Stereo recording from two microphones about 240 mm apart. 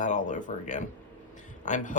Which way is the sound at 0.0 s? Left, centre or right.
Left.